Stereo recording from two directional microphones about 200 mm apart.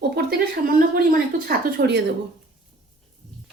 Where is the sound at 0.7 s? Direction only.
45° right (ahead or behind).